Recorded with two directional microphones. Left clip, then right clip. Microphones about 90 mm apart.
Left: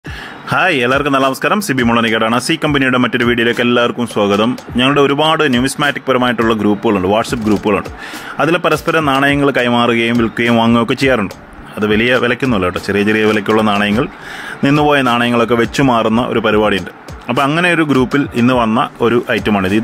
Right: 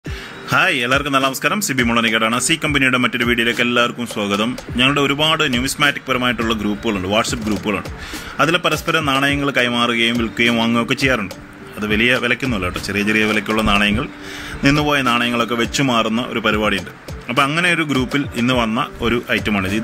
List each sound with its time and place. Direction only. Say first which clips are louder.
0.5 s speech: left 3 dB; 50° left (ahead or behind); by 11.2 s 65° left (ahead or behind)
11.8 s speech: left 4 dB; 55° left (ahead or behind)
14.6 s speech: left 5 dB; 55° left (ahead or behind)